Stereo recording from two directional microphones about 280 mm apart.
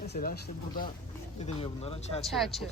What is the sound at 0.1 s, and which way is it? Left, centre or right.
Speech, left.